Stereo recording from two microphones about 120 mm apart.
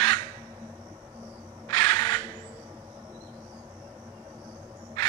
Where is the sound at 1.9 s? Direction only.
35° left (ahead or behind).